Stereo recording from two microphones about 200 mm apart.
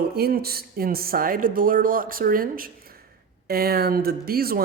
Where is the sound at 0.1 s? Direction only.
50° right (ahead or behind).